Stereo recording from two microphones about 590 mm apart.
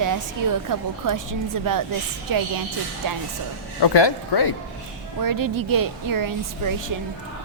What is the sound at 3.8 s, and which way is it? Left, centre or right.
Speech, left.